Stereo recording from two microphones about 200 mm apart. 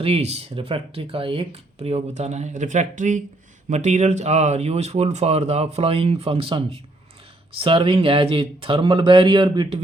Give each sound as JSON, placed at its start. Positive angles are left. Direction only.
{"t": 0.0, "sound": "speech", "side_deg": -30}